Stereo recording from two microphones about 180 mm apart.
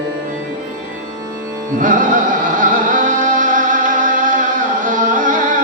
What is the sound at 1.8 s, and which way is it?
Music, 45° right (ahead or behind).